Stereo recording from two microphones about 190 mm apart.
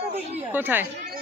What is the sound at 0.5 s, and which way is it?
Speech, 10° right (ahead or behind).